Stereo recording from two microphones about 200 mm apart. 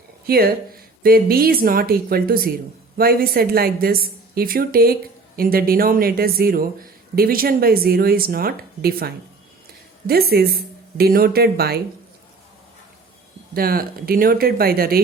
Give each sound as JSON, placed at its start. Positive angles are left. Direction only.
{"t": 0.3, "sound": "a woman's voice", "side_deg": -50}
{"t": 13.5, "sound": "a woman's voice", "side_deg": -45}